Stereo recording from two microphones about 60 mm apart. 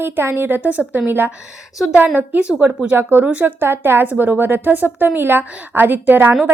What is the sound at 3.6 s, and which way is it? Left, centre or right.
A woman's voice, right.